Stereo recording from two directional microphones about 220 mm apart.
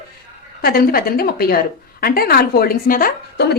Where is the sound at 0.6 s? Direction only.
45° left (ahead or behind).